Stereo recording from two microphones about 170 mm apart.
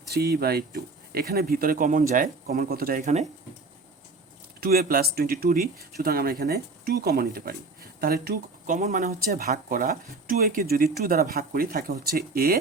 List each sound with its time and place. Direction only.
0.1 s speech: 65° right (ahead or behind); by 3.2 s 45° right (ahead or behind)
4.6 s speech: 65° right (ahead or behind)